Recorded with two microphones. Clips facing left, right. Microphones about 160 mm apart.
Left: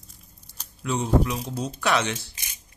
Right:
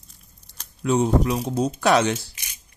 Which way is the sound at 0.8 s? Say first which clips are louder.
Right 4 dB; 45° right (ahead or behind).